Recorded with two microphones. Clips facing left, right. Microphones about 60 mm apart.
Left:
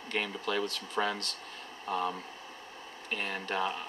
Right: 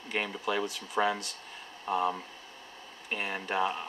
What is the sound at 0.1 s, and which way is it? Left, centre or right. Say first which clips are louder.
Speech: right 1 dB; centre.